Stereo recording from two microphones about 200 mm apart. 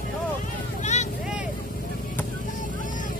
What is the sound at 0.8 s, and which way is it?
Vehicle, 35° left (ahead or behind).